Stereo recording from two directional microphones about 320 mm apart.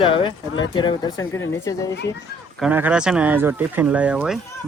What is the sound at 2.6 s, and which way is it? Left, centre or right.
Speech, centre.